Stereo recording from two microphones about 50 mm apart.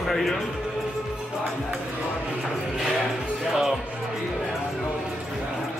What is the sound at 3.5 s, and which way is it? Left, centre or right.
Music, centre.